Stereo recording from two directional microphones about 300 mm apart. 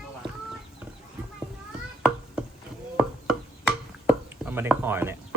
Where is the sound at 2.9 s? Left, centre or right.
Centre.